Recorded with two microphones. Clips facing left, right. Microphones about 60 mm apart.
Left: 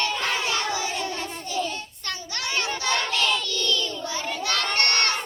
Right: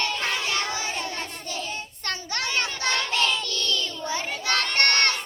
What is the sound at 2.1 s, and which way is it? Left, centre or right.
Child singing, right.